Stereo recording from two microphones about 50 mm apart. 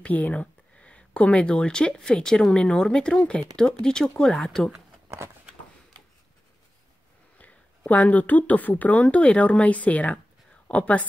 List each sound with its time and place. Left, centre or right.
0.0 s speech: left
4.5 s speech: centre
7.3 s speech: left